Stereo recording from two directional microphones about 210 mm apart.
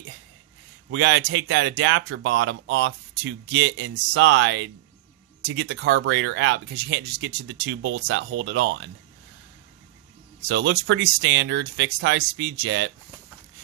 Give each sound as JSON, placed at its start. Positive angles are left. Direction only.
{"t": 0.8, "sound": "speech", "side_deg": -60}
{"t": 10.5, "sound": "speech", "side_deg": -60}